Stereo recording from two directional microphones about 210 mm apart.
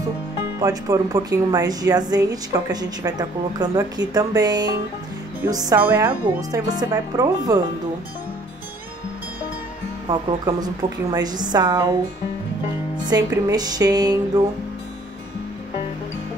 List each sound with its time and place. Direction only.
0.6 s speech: 15° right (ahead or behind)
10.0 s a woman's voice: 20° right (ahead or behind)
13.0 s a woman's voice: 20° right (ahead or behind)